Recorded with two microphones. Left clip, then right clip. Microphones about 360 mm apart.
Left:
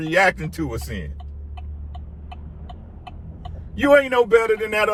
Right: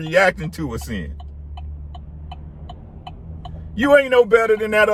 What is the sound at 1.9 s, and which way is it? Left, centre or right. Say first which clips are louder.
Vehicle: right 2 dB; right.